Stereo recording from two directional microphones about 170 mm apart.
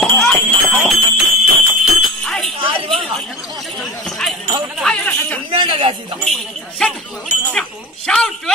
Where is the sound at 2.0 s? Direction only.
5° left (ahead or behind).